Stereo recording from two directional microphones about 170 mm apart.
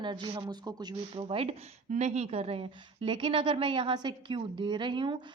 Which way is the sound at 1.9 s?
45° right (ahead or behind).